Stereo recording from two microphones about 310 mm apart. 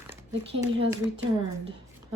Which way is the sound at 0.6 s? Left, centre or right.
Centre.